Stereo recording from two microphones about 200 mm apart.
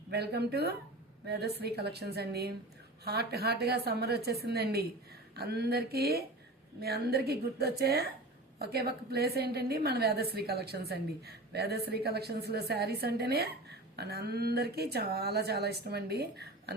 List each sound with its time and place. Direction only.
0.1 s a woman's voice: 55° right (ahead or behind)